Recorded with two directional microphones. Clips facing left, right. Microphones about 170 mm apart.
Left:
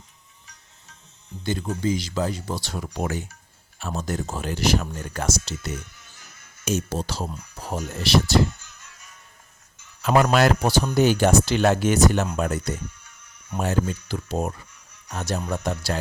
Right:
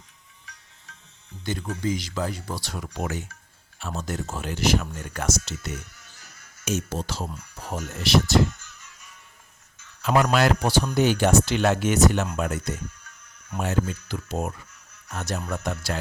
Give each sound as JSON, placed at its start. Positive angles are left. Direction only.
{"t": 1.5, "sound": "speech", "side_deg": 30}
{"t": 10.0, "sound": "speech", "side_deg": 45}